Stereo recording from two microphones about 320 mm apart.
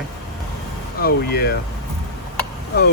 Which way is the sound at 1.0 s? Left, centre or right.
Left.